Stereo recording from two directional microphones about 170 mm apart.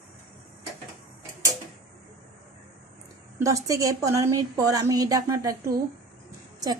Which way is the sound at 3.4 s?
20° right (ahead or behind).